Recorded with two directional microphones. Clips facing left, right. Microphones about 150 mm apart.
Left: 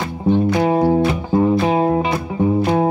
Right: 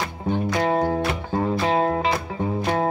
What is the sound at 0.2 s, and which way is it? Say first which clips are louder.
Music: left 8 dB; 20° left (ahead or behind).